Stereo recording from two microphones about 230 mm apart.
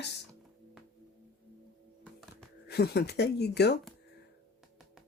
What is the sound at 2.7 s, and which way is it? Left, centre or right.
Speech, left.